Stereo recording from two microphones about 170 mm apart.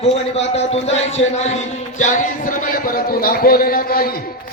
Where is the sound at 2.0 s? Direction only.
50° left (ahead or behind).